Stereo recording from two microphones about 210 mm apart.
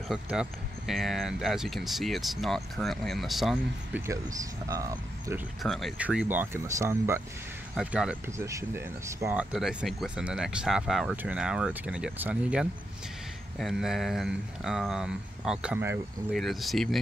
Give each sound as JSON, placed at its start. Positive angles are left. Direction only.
{"t": 0.1, "sound": "speech", "side_deg": -5}
{"t": 4.0, "sound": "speech", "side_deg": -15}
{"t": 5.6, "sound": "speech", "side_deg": 0}